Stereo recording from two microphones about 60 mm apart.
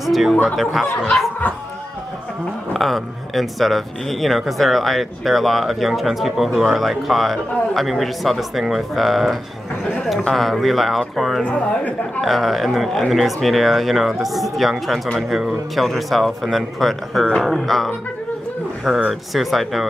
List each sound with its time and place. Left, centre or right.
0.0 s a sound: centre
1.0 s speech: centre
2.7 s speech: centre
11.4 s speech: left
12.2 s speech: centre